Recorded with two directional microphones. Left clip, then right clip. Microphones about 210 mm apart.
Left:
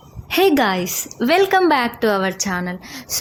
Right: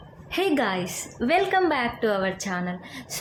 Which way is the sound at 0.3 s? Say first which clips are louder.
Left 8 dB; 45° left (ahead or behind).